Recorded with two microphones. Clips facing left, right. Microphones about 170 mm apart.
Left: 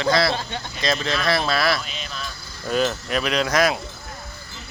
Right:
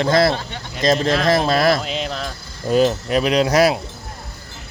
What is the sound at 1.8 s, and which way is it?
Mantra, 90° right.